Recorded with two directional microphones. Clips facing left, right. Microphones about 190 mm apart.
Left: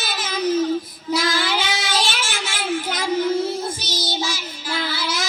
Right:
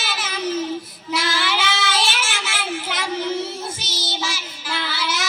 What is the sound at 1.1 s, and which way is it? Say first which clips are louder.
Child singing: left 2 dB; 15° left (ahead or behind).